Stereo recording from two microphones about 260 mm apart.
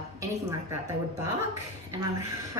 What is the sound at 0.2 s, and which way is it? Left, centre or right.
Speech, centre.